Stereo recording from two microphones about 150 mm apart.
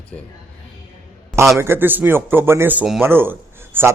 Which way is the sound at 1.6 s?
15° right (ahead or behind).